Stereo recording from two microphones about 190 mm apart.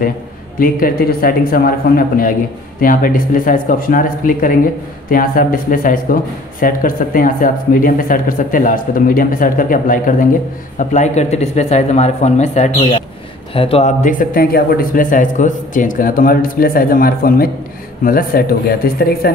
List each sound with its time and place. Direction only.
0.6 s speech: 50° left (ahead or behind)